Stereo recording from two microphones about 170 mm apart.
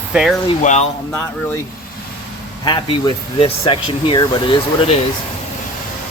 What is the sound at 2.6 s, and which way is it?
Speech, 25° left (ahead or behind).